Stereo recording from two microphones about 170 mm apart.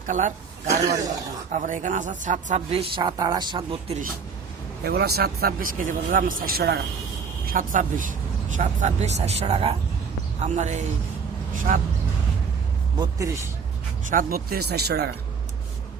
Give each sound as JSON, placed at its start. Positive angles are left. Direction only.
{"t": 0.1, "sound": "speech", "side_deg": -50}
{"t": 1.5, "sound": "speech", "side_deg": -50}
{"t": 4.8, "sound": "speech", "side_deg": -70}
{"t": 7.5, "sound": "speech", "side_deg": -50}
{"t": 13.0, "sound": "speech", "side_deg": -20}
{"t": 14.1, "sound": "speech", "side_deg": -55}